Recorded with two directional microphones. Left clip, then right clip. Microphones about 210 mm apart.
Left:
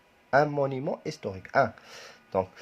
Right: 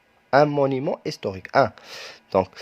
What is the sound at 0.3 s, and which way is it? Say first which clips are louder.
Speech: right 6 dB; 30° right (ahead or behind).